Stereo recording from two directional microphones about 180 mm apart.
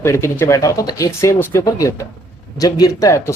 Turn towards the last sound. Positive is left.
turn(degrees=15)  # may be behind; listen again after turning